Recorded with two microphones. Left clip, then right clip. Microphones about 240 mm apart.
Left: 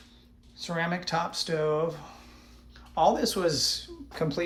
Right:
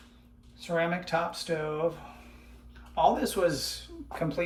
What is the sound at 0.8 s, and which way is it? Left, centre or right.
Speech, centre.